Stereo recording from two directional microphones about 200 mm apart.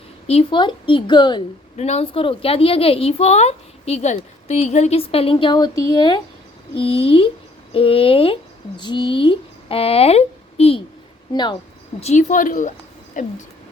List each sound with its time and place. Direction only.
0.3 s a woman's voice: 25° left (ahead or behind)
1.7 s a woman's voice: 35° left (ahead or behind)
11.9 s a woman's voice: 35° left (ahead or behind)